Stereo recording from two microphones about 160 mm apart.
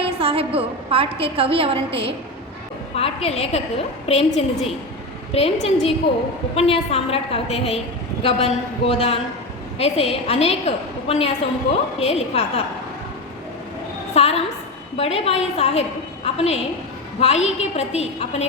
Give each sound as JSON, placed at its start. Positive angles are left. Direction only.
{"t": 0.0, "sound": "a woman's voice", "side_deg": -35}
{"t": 2.9, "sound": "a woman's voice", "side_deg": 40}
{"t": 14.1, "sound": "a woman's voice", "side_deg": 40}